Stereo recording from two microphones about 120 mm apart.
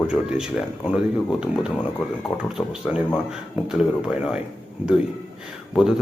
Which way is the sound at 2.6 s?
5° right (ahead or behind).